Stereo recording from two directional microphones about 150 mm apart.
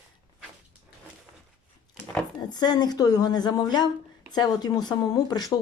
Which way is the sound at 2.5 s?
30° left (ahead or behind).